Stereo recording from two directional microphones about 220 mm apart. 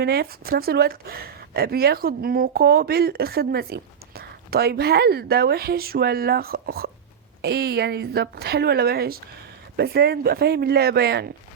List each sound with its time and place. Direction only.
0.0 s speech: 45° right (ahead or behind)